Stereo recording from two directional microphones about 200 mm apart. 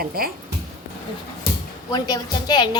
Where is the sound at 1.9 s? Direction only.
20° left (ahead or behind).